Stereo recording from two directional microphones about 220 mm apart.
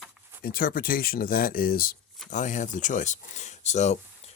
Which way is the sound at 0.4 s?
40° left (ahead or behind).